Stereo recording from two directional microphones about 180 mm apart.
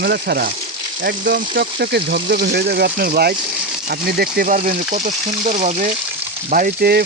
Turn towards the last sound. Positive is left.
turn(degrees=-55)  # may be behind; listen again after turning